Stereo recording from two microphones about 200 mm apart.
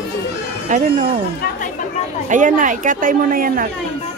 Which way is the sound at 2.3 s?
40° right (ahead or behind).